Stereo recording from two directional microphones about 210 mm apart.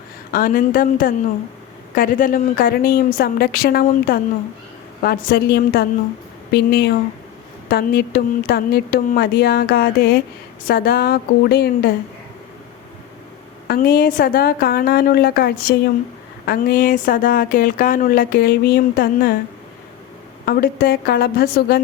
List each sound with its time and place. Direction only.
0.3 s a woman's voice: 40° left (ahead or behind)
13.7 s speech: 45° left (ahead or behind)
20.4 s speech: 45° left (ahead or behind)